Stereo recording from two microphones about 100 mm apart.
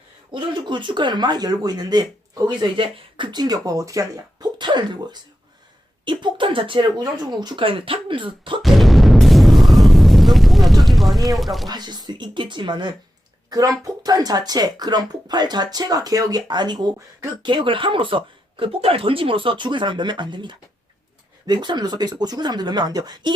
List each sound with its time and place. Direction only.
0.3 s speech: 50° right (ahead or behind)
2.8 s speech: 55° right (ahead or behind)
7.0 s speech: 45° right (ahead or behind)
7.6 s speech: 65° right (ahead or behind)
8.6 s a sound: centre (ahead or behind)
11.3 s speech: centre (ahead or behind)
11.7 s speech: 45° right (ahead or behind)
13.5 s speech: 35° right (ahead or behind)